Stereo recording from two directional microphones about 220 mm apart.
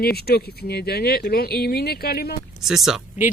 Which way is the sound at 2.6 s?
Centre (ahead or behind).